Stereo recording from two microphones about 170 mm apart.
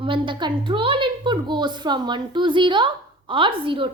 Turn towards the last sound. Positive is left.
turn(degrees=-30)  # may be behind; listen again after turning